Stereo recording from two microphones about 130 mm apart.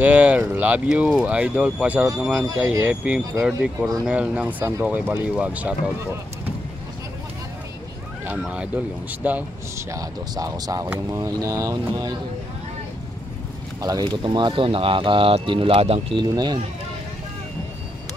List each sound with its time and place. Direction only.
0.0 s speech: 10° right (ahead or behind)
8.4 s speech: 10° right (ahead or behind)
9.8 s speech: 25° right (ahead or behind)
13.7 s speech: 30° right (ahead or behind)